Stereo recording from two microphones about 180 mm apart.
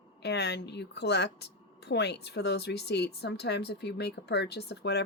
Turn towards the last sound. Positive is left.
turn(degrees=65)  # may be behind; listen again after turning